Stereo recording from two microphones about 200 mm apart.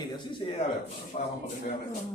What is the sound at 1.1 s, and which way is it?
Speech, 35° left (ahead or behind).